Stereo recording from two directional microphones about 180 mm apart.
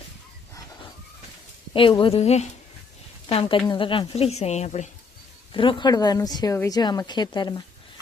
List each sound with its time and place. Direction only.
1.7 s speech: 30° left (ahead or behind)
5.5 s a woman's voice: 30° left (ahead or behind)